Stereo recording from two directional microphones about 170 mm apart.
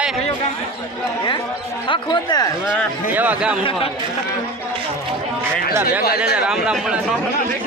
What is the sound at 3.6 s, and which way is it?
Speech, 30° left (ahead or behind).